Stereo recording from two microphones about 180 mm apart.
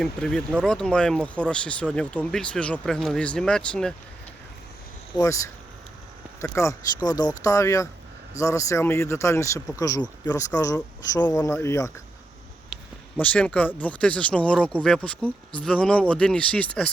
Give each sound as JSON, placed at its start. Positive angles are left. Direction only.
{"t": 0.0, "sound": "speech", "side_deg": 5}
{"t": 5.1, "sound": "speech", "side_deg": 15}
{"t": 6.4, "sound": "speech", "side_deg": 15}
{"t": 13.1, "sound": "speech", "side_deg": 10}